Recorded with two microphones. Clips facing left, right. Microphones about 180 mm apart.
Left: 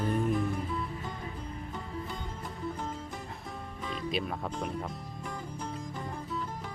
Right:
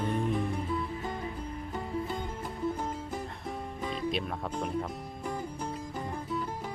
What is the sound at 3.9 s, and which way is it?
Speech, centre (ahead or behind).